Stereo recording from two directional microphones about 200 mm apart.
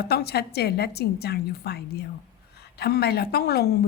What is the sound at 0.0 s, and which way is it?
A woman's voice, 55° left (ahead or behind).